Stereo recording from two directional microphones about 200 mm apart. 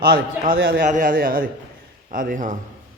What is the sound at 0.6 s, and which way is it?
A man's voice, 45° right (ahead or behind).